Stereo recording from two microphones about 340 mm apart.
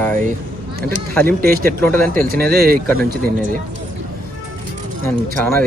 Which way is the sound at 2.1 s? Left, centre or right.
Right.